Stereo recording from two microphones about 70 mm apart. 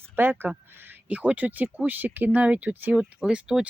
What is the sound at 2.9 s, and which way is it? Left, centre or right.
Speech, centre.